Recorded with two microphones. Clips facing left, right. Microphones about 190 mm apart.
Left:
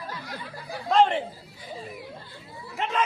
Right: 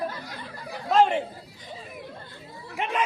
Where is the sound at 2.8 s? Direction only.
15° right (ahead or behind).